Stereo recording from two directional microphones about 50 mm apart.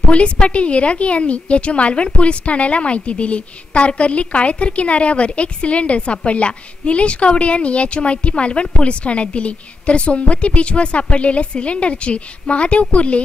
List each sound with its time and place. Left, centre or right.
0.1 s a woman's voice: left